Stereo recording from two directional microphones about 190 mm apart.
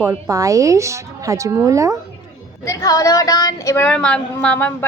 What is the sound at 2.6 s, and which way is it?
Speech, 15° left (ahead or behind).